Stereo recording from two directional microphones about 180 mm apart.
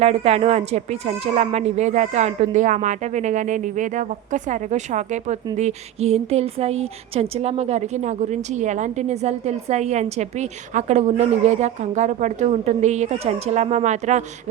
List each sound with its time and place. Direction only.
0.0 s a woman's voice: 35° right (ahead or behind)